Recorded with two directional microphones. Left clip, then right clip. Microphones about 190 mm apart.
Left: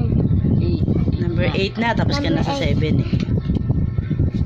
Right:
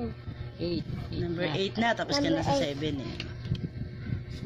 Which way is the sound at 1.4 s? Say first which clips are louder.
Left 7 dB; 5° left (ahead or behind).